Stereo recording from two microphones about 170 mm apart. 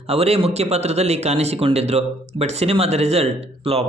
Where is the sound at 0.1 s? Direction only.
35° right (ahead or behind).